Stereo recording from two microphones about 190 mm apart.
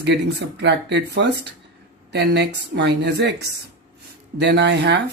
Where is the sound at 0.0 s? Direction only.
65° right (ahead or behind).